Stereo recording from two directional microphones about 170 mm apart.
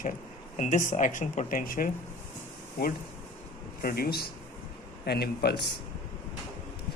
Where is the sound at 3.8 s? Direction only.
65° left (ahead or behind).